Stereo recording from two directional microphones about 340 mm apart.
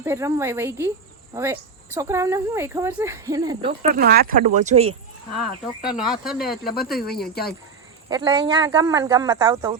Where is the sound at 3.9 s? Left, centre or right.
Right.